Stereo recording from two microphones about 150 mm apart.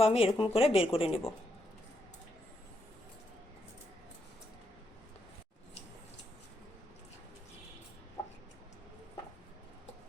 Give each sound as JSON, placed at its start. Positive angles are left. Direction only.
{"t": 0.0, "sound": "speech", "side_deg": 40}